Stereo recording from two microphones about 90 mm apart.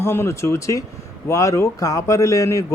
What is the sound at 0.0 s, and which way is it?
Speech, 30° left (ahead or behind).